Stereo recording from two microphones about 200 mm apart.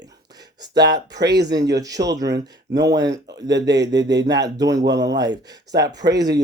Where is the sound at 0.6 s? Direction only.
20° right (ahead or behind).